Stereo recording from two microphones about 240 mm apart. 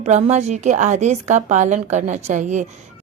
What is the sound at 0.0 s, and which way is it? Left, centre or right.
A woman's voice, right.